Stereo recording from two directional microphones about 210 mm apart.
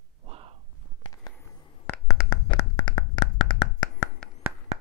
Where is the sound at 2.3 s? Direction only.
20° left (ahead or behind).